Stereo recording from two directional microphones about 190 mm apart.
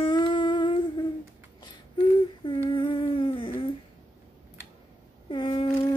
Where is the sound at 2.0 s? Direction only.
25° left (ahead or behind).